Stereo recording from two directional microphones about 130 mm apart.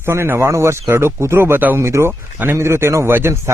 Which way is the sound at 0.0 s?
20° right (ahead or behind).